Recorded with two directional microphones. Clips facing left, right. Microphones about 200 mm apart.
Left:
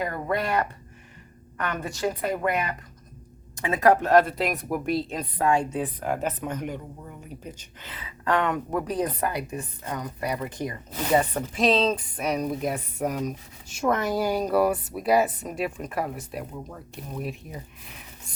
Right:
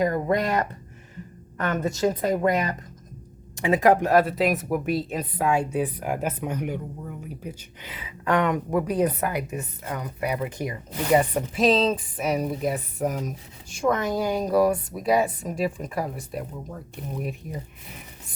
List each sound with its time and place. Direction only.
0.0 s speech: 20° right (ahead or behind)
1.8 s speech: 20° right (ahead or behind)
11.6 s speech: centre (ahead or behind)